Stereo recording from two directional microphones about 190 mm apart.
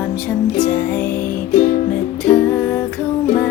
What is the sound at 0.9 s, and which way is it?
Music, 10° left (ahead or behind).